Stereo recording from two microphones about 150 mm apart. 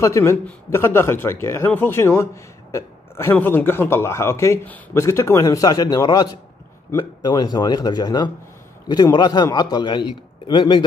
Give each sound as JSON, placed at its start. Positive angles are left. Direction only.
{"t": 0.0, "sound": "a man's voice", "side_deg": 20}